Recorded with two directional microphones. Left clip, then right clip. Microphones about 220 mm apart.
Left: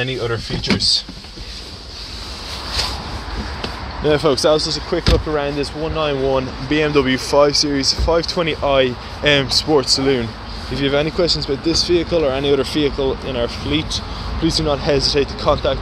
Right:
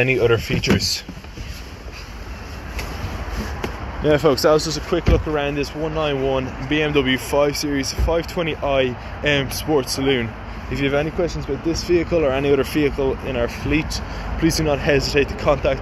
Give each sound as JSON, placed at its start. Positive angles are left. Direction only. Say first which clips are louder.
{"t": 0.0, "sound": "speech", "louder": "right 5 dB", "side_deg": -25}
{"t": 4.0, "sound": "speech", "louder": "left 1 dB", "side_deg": 0}
{"t": 4.6, "sound": "speech", "louder": "left 1 dB", "side_deg": -15}
{"t": 5.1, "sound": "speech", "louder": "left 3 dB", "side_deg": 5}